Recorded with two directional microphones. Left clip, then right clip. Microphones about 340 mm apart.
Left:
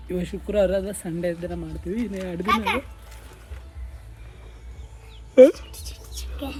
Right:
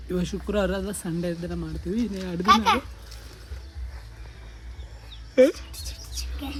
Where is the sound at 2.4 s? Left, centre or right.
Centre.